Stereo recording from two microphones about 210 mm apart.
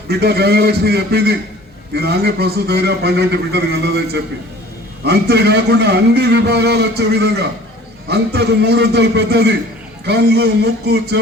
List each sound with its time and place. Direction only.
0.1 s a man's voice: 50° right (ahead or behind)